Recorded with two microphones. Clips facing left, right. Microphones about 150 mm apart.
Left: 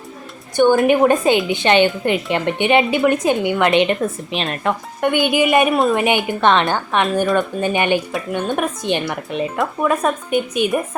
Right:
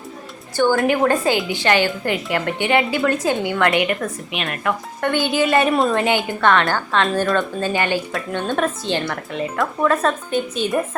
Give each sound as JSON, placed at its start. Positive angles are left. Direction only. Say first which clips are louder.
{"t": 0.5, "sound": "a woman's voice", "louder": "left 4 dB", "side_deg": 20}
{"t": 4.9, "sound": "a woman's voice", "louder": "left 3 dB", "side_deg": 15}